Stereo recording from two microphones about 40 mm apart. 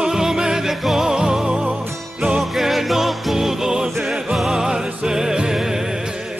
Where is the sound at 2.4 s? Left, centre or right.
Centre.